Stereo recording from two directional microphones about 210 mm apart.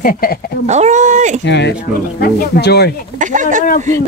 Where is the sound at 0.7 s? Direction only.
35° right (ahead or behind).